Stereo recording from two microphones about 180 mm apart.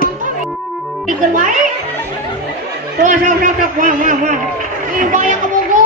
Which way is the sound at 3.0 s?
45° right (ahead or behind).